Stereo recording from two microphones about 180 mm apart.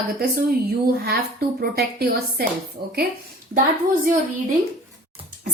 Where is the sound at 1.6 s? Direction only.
60° right (ahead or behind).